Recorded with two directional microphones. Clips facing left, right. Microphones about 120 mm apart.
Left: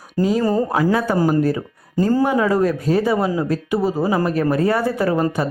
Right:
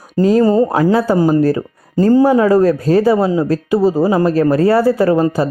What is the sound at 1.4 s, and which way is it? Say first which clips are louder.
Speech: right 5 dB; 40° right (ahead or behind).